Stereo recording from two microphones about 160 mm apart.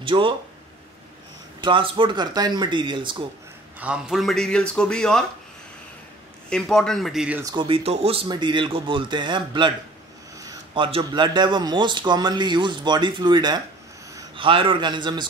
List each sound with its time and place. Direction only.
0.0 s speech: 30° right (ahead or behind)
1.6 s speech: 30° right (ahead or behind)
3.8 s speech: 5° right (ahead or behind)
6.5 s speech: 5° left (ahead or behind)
7.4 s a man's voice: 30° right (ahead or behind)